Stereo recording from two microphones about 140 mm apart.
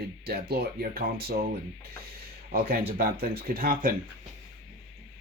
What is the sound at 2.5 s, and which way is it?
Speech, 90° right.